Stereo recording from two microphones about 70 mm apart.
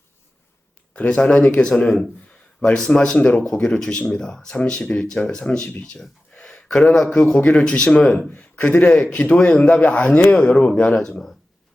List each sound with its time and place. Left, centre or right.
0.9 s speech: centre
8.3 s speech: centre
10.8 s speech: centre